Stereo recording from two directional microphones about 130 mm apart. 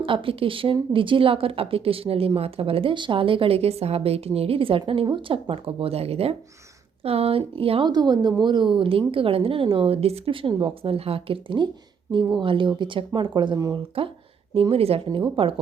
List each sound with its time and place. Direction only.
0.0 s a woman's voice: 45° right (ahead or behind)